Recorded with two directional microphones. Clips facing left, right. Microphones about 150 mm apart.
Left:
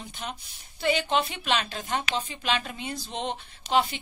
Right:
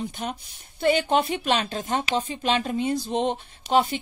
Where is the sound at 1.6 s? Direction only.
35° right (ahead or behind).